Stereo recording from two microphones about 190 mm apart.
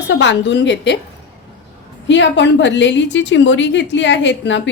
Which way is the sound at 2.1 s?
70° left (ahead or behind).